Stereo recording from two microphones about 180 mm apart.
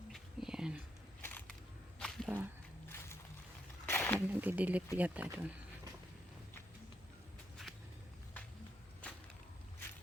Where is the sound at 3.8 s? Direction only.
10° left (ahead or behind).